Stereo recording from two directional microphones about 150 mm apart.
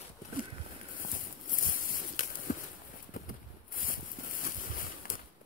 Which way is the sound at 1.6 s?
65° left (ahead or behind).